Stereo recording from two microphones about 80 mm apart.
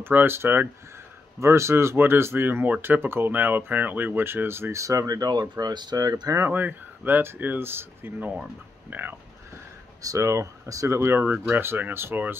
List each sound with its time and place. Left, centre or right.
0.0 s speech: right
6.3 s speech: right
10.0 s speech: right